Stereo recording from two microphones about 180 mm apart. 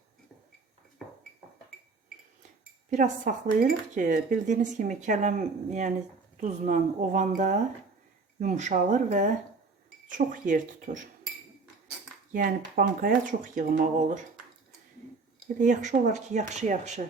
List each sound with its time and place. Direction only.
1.0 s a sound: 5° left (ahead or behind)
2.9 s speech: 45° right (ahead or behind)
12.3 s speech: 50° right (ahead or behind)
15.5 s speech: 45° right (ahead or behind)